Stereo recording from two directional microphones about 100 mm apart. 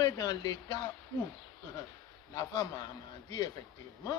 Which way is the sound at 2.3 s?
40° left (ahead or behind).